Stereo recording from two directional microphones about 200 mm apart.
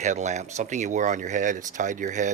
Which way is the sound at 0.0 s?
35° right (ahead or behind).